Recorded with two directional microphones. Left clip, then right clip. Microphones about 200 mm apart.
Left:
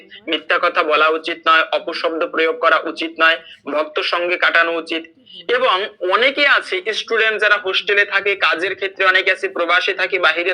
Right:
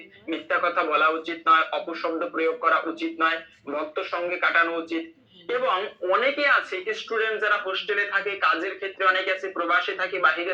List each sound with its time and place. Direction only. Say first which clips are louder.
0.3 s speech: left 8 dB; 45° left (ahead or behind)